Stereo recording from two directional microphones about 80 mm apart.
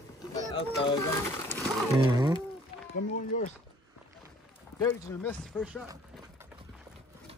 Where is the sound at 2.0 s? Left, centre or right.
Right.